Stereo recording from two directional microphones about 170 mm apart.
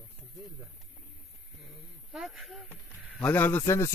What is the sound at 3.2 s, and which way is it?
Speech, 10° left (ahead or behind).